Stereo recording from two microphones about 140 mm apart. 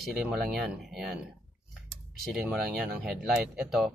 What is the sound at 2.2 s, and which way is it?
Speech, 5° right (ahead or behind).